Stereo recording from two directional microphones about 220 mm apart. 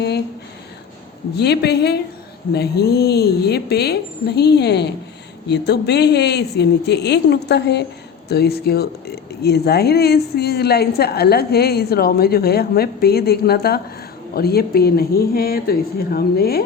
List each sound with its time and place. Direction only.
1.4 s speech: 50° left (ahead or behind)